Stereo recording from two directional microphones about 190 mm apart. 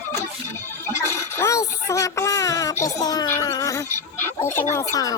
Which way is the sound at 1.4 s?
15° left (ahead or behind).